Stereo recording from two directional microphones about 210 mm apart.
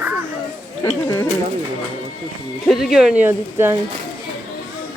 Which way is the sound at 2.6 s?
Centre (ahead or behind).